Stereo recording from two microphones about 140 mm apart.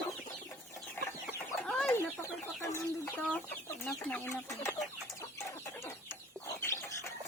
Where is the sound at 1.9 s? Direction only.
20° left (ahead or behind).